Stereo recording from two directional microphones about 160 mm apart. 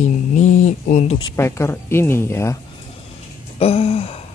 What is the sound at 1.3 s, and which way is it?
Speech, 15° left (ahead or behind).